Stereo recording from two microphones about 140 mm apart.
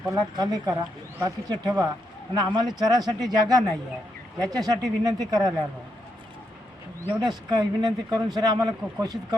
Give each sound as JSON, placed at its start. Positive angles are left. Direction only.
{"t": 0.1, "sound": "speech", "side_deg": -25}
{"t": 7.1, "sound": "speech", "side_deg": -30}